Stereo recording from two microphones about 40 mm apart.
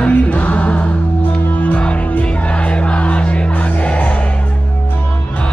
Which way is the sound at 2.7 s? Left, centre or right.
Left.